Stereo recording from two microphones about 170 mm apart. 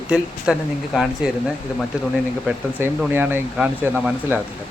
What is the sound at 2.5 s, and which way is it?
Speech, 5° right (ahead or behind).